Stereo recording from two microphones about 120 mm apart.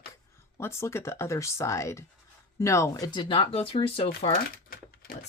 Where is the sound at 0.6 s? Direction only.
20° left (ahead or behind); by 4.3 s 50° left (ahead or behind).